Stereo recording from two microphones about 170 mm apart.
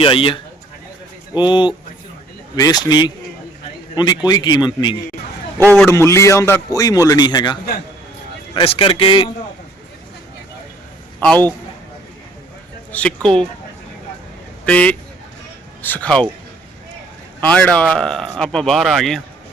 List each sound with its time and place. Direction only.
0.0 s speech: 30° left (ahead or behind)
1.4 s a man's voice: 25° left (ahead or behind)
11.2 s a man's voice: 5° left (ahead or behind)
12.9 s speech: 5° left (ahead or behind)
14.6 s a man's voice: 10° left (ahead or behind)
17.4 s speech: 5° left (ahead or behind)